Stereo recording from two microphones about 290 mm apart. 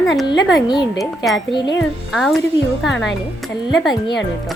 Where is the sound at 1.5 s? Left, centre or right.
Centre.